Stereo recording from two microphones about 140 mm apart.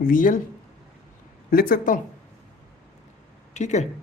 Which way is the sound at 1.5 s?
90° left.